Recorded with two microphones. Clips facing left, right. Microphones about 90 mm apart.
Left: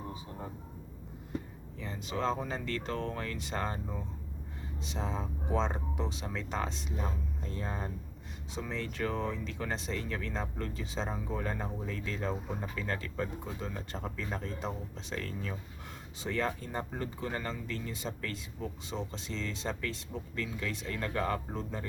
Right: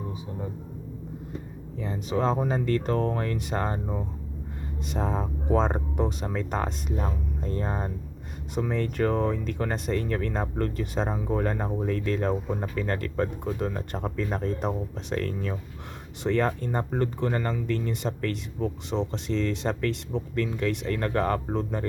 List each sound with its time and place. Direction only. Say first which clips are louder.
2.1 s speech: right 8 dB; 45° right (ahead or behind)
4.9 s speech: right 8 dB; 55° right (ahead or behind)